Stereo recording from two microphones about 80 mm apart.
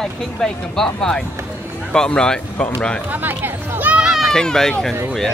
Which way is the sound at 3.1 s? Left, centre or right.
Right.